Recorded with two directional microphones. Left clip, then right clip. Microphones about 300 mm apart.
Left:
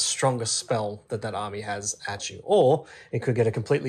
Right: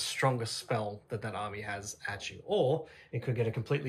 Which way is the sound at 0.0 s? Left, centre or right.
Centre.